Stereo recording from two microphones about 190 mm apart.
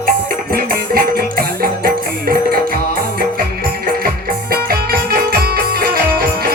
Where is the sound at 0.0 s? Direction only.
50° right (ahead or behind).